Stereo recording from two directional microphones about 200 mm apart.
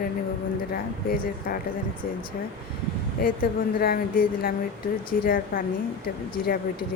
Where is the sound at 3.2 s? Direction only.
45° left (ahead or behind).